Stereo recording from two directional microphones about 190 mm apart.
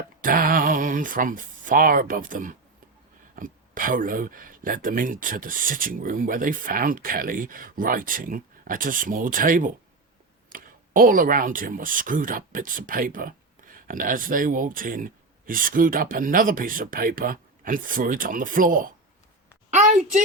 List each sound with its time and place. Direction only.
0.2 s speech: 45° right (ahead or behind)